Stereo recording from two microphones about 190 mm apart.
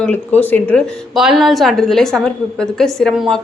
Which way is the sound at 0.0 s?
10° left (ahead or behind).